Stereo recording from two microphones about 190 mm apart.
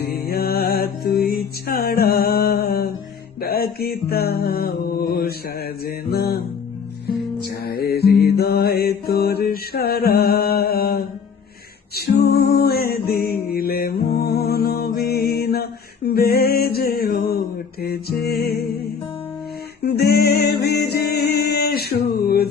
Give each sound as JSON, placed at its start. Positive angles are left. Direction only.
{"t": 0.0, "sound": "music", "side_deg": 55}
{"t": 5.8, "sound": "mantra", "side_deg": 55}
{"t": 7.6, "sound": "mantra", "side_deg": 55}
{"t": 11.9, "sound": "music", "side_deg": 55}
{"t": 19.8, "sound": "music", "side_deg": 55}